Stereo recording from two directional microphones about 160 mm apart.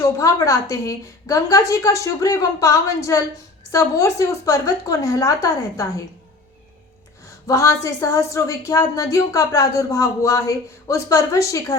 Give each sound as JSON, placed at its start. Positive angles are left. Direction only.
{"t": 0.0, "sound": "speech", "side_deg": 20}
{"t": 7.4, "sound": "speech", "side_deg": 20}